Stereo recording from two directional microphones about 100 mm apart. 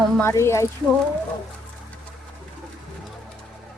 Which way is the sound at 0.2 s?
25° left (ahead or behind).